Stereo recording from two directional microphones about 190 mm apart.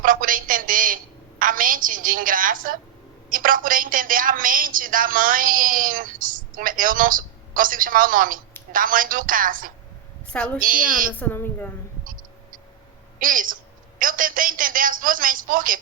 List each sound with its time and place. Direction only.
0.0 s a sound: 45° right (ahead or behind)
1.4 s a woman's voice: 45° right (ahead or behind)
10.3 s a woman's voice: 5° left (ahead or behind)
10.6 s a woman's voice: 45° right (ahead or behind)
11.2 s a woman's voice: 10° left (ahead or behind)
13.1 s a woman's voice: 45° right (ahead or behind)